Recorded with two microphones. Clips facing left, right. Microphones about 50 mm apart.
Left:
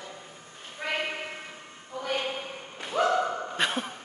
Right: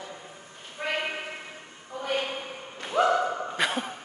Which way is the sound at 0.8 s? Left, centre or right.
Right.